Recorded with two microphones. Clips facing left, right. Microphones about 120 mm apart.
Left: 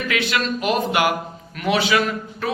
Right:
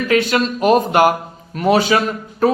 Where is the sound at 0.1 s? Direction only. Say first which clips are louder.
Right 7 dB; 40° right (ahead or behind).